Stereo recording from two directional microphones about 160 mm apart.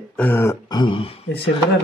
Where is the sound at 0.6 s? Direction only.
30° left (ahead or behind).